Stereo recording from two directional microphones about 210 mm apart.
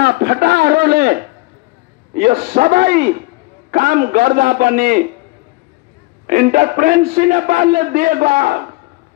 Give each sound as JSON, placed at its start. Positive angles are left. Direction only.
{"t": 0.0, "sound": "a man's voice", "side_deg": -45}
{"t": 6.2, "sound": "a man's voice", "side_deg": -40}